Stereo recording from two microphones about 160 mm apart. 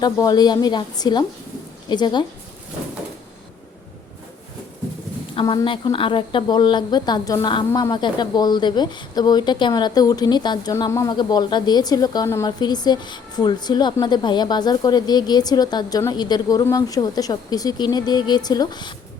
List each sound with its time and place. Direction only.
0.0 s a woman's voice: 25° left (ahead or behind)
5.6 s a woman's voice: 30° left (ahead or behind)